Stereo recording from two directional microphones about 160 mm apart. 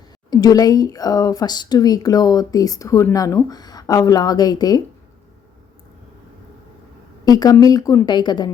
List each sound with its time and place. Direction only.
0.3 s speech: 25° left (ahead or behind)
7.3 s speech: 25° left (ahead or behind)